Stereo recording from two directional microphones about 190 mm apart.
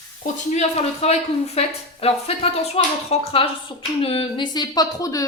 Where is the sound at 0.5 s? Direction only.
35° left (ahead or behind).